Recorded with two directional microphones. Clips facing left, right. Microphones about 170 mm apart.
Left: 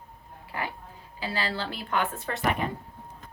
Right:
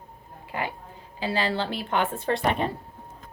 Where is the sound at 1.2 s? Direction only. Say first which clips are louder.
Right 5 dB; 25° right (ahead or behind).